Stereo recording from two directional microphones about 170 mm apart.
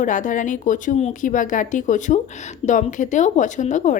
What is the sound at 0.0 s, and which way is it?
A woman's voice, 50° left (ahead or behind).